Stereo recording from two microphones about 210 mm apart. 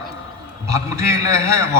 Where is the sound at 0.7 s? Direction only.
15° right (ahead or behind).